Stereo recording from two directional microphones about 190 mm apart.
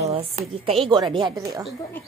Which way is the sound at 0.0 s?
30° right (ahead or behind).